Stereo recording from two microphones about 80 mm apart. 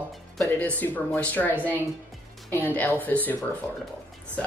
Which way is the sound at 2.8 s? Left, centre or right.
Left.